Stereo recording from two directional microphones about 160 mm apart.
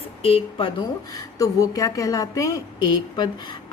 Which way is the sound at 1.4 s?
20° left (ahead or behind).